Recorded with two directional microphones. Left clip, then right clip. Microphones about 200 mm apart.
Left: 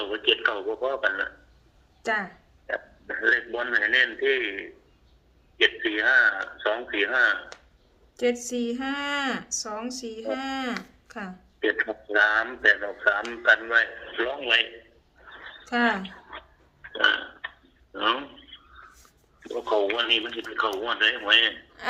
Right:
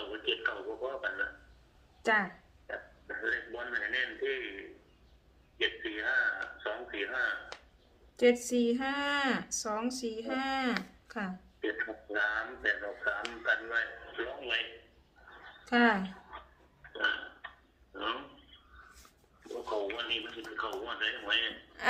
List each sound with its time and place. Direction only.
0.0 s a man's voice: 55° left (ahead or behind)
2.0 s speech: 5° left (ahead or behind)
2.6 s speech: 60° left (ahead or behind)
8.1 s speech: 5° left (ahead or behind)
11.6 s speech: 55° left (ahead or behind)
15.3 s a sound: 55° left (ahead or behind)
15.6 s speech: 5° left (ahead or behind)
16.9 s a sound: 55° left (ahead or behind)
19.4 s speech: 55° left (ahead or behind)
21.8 s a sound: 5° right (ahead or behind)